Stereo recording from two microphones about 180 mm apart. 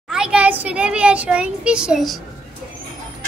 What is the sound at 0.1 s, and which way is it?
A child's voice, 5° right (ahead or behind).